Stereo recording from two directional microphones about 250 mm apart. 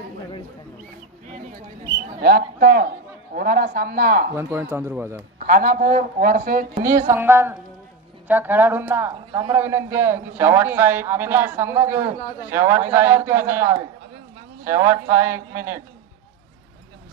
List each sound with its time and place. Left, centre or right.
2.2 s speech: right
4.4 s a man's voice: centre
5.5 s speech: right
7.1 s a man's voice: centre